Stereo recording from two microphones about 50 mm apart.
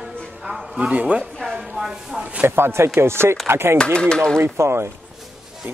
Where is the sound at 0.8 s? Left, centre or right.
Right.